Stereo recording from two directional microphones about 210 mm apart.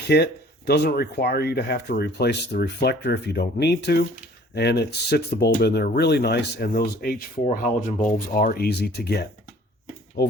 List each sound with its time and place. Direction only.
0.1 s speech: 50° left (ahead or behind)